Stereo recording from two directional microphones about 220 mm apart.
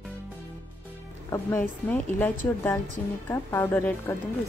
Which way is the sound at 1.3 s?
10° left (ahead or behind).